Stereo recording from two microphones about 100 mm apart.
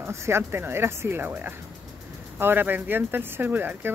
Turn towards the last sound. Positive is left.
turn(degrees=-20)  # may be behind; listen again after turning